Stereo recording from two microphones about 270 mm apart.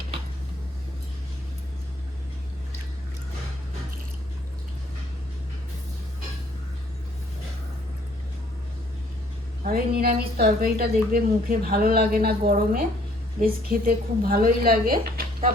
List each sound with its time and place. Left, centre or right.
9.6 s a woman's voice: right